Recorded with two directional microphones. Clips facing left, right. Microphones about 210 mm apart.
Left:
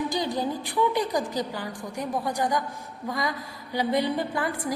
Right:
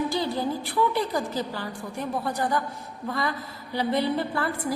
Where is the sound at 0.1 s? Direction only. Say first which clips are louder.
Right 1 dB; 15° left (ahead or behind).